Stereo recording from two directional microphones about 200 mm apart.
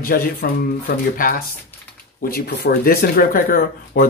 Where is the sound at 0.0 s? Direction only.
50° left (ahead or behind).